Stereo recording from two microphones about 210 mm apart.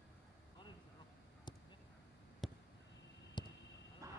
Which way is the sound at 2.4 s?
Centre (ahead or behind).